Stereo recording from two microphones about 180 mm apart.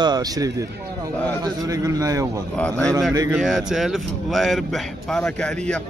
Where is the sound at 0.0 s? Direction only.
20° right (ahead or behind).